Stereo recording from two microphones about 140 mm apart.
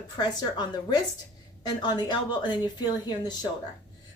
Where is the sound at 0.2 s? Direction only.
30° left (ahead or behind).